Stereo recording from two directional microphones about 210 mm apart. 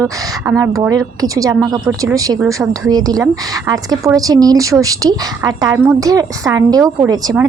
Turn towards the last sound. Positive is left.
turn(degrees=-15)  # may be behind; listen again after turning